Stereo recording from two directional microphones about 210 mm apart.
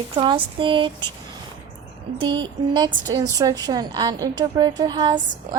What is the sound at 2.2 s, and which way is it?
A woman's voice, 20° right (ahead or behind).